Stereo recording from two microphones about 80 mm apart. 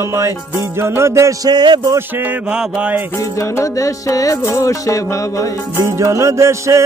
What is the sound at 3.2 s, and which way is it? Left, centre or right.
Music, left.